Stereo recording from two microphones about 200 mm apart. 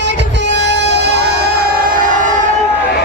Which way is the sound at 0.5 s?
60° right (ahead or behind).